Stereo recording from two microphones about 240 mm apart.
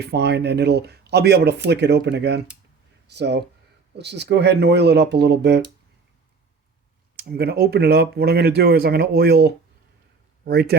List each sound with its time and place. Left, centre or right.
0.0 s speech: right
7.2 s speech: right